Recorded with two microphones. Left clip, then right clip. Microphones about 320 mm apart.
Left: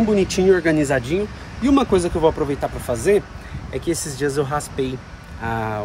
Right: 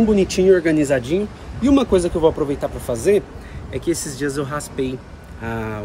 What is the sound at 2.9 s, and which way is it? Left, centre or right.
Speech, centre.